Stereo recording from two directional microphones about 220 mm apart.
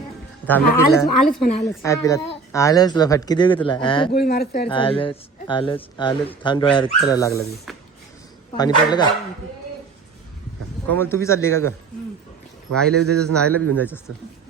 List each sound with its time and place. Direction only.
0.4 s a man's voice: 10° left (ahead or behind)
1.4 s a woman's voice: 30° left (ahead or behind)
1.6 s a man's voice: 15° left (ahead or behind)
4.1 s speech: 45° left (ahead or behind)
4.7 s speech: 25° left (ahead or behind)
8.5 s speech: 20° left (ahead or behind)
10.8 s a man's voice: 10° left (ahead or behind)
12.8 s a man's voice: 90° right
13.7 s a man's voice: 10° left (ahead or behind)